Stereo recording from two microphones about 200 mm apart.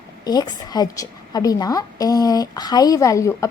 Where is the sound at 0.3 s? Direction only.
20° left (ahead or behind).